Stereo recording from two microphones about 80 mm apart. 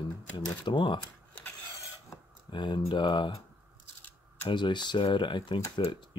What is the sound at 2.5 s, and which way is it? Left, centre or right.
Speech, left.